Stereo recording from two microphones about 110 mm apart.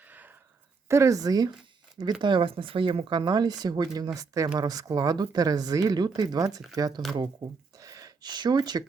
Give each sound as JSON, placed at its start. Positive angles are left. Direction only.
{"t": 0.0, "sound": "a sound", "side_deg": -15}
{"t": 0.9, "sound": "speech", "side_deg": -25}
{"t": 2.2, "sound": "speech", "side_deg": -50}